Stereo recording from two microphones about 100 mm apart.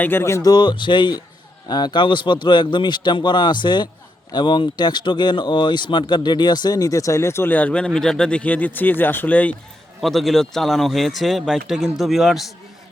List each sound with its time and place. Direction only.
0.0 s speech: 25° left (ahead or behind)
0.5 s a man's voice: 50° left (ahead or behind); by 9.6 s 15° left (ahead or behind)
10.0 s speech: centre (ahead or behind)